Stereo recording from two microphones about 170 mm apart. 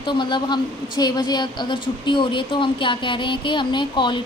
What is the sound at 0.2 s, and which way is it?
A woman's voice, 25° left (ahead or behind).